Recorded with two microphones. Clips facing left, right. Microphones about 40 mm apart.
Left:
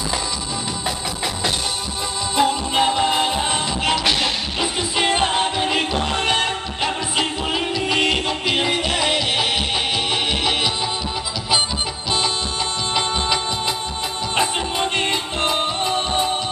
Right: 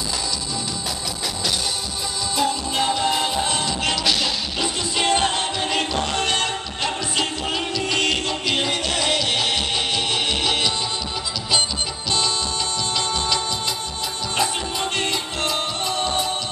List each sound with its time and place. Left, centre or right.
2.3 s music: left; by 10.7 s centre
12.9 s music: left